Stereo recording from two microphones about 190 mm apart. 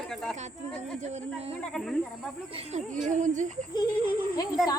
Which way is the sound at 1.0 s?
35° right (ahead or behind).